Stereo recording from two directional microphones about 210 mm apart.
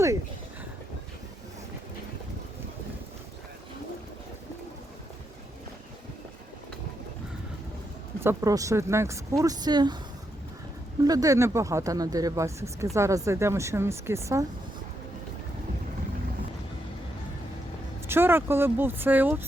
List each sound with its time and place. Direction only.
8.2 s speech: 15° right (ahead or behind)
11.0 s speech: 15° right (ahead or behind)
18.1 s speech: 10° right (ahead or behind)